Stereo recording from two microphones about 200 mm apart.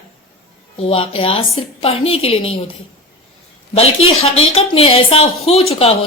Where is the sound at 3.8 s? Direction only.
90° left.